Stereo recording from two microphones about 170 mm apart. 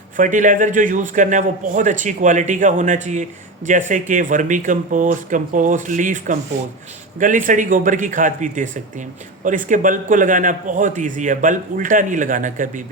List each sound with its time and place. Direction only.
0.2 s speech: 50° right (ahead or behind)